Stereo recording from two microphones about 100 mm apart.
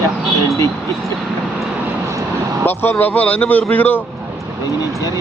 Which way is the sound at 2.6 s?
20° left (ahead or behind).